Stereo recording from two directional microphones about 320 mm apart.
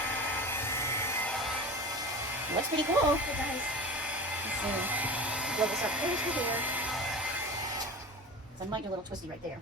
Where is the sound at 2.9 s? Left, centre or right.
Centre.